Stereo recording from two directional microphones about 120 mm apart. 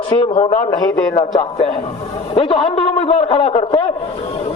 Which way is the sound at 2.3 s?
50° left (ahead or behind).